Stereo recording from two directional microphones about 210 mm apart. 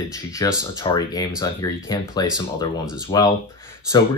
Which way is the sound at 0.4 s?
15° left (ahead or behind).